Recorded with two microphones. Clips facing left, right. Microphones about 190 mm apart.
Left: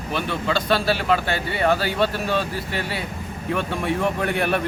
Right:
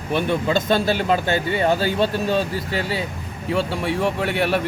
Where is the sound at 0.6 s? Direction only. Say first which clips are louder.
Right 2 dB; 20° right (ahead or behind).